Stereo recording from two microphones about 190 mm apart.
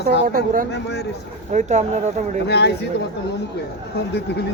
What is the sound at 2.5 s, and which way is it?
Speech, 60° left (ahead or behind).